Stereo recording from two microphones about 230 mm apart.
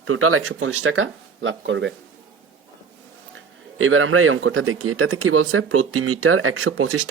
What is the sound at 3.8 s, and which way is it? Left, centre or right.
Speech, right.